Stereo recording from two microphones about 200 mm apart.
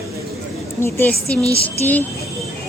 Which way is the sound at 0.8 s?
10° left (ahead or behind).